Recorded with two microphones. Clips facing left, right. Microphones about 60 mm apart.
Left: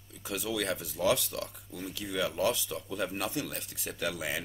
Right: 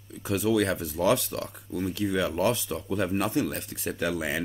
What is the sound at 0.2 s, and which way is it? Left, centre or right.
Speech, right.